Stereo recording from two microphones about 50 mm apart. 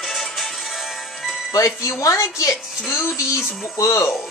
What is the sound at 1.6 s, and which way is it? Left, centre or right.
Speech, left.